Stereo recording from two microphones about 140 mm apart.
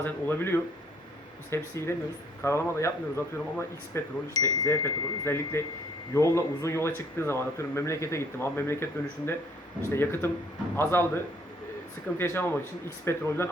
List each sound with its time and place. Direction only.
0.0 s speech: 15° left (ahead or behind)